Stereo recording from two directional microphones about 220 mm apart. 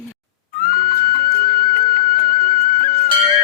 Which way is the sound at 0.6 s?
40° left (ahead or behind).